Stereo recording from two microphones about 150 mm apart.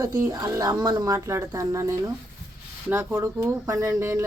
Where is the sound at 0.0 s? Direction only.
20° right (ahead or behind).